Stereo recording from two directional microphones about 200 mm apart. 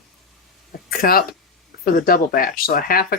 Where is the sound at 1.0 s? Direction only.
45° left (ahead or behind).